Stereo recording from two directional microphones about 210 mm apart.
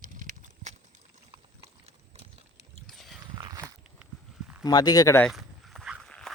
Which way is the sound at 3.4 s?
20° right (ahead or behind).